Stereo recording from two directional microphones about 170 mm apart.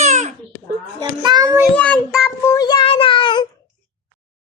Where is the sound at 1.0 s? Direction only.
25° right (ahead or behind).